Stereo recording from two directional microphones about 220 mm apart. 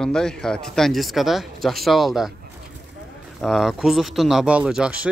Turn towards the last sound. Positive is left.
turn(degrees=-5)  # may be behind; listen again after turning